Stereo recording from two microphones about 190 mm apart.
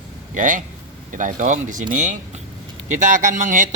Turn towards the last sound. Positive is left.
turn(degrees=-40)  # may be behind; listen again after turning